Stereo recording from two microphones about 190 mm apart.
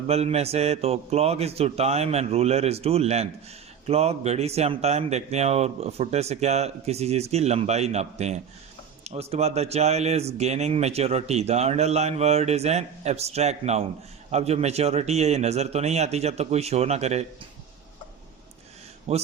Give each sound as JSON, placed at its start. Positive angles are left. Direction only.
{"t": 0.1, "sound": "speech", "side_deg": -35}
{"t": 19.1, "sound": "speech", "side_deg": -30}